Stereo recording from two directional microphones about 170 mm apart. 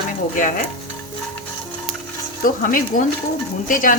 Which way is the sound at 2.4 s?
55° left (ahead or behind).